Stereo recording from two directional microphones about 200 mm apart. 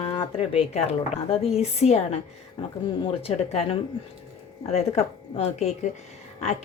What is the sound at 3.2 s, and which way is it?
A woman's voice, 30° left (ahead or behind).